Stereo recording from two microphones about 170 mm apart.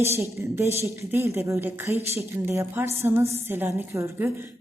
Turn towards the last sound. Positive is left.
turn(degrees=-15)  # may be behind; listen again after turning